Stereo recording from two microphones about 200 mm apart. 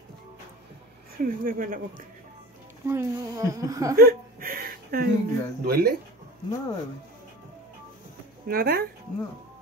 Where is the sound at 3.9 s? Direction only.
45° right (ahead or behind).